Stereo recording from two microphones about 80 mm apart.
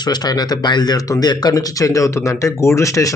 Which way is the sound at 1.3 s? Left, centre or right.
Left.